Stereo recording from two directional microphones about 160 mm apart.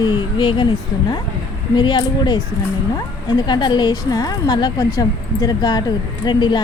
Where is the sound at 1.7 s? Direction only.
30° left (ahead or behind).